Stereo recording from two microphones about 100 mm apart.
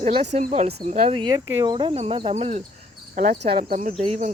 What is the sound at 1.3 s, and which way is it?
Speech, 45° right (ahead or behind).